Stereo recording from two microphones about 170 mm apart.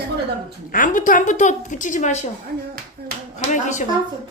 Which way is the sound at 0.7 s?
50° left (ahead or behind).